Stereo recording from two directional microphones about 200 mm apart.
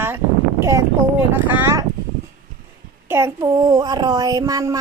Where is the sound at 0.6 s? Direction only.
15° right (ahead or behind).